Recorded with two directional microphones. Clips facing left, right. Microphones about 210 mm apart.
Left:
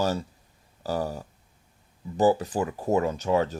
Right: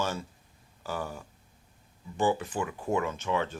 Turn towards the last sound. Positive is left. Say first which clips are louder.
# left 6 dB
turn(degrees=40)  # may be behind; listen again after turning